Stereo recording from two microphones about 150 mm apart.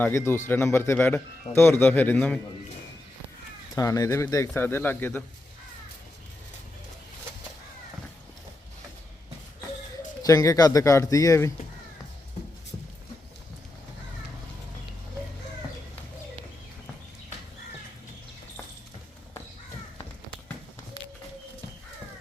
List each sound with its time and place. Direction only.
0.0 s a man's voice: 15° left (ahead or behind)
3.8 s a man's voice: 20° left (ahead or behind)
10.2 s speech: 25° left (ahead or behind)